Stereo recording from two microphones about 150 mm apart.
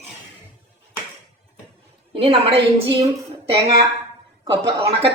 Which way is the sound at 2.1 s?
40° right (ahead or behind).